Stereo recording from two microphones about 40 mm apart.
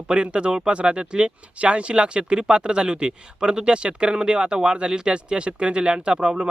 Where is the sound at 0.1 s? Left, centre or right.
Right.